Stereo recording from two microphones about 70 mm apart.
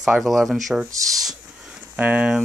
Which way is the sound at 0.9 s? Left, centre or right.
Right.